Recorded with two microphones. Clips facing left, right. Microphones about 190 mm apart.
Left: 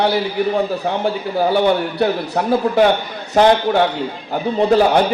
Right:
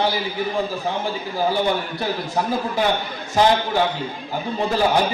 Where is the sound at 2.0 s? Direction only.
65° left (ahead or behind).